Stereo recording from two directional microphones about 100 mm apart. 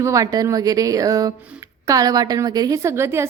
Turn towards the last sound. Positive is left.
turn(degrees=-25)  # may be behind; listen again after turning